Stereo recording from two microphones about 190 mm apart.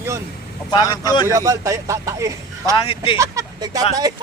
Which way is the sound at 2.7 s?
25° left (ahead or behind).